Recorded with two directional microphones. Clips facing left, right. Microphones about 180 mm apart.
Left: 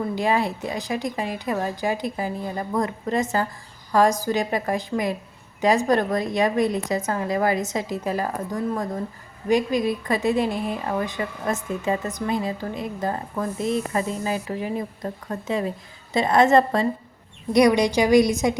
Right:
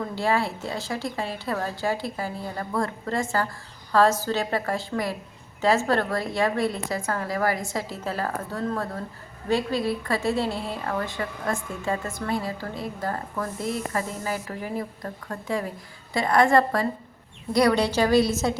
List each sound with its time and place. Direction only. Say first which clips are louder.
0.0 s a woman's voice: left 2 dB; 15° left (ahead or behind)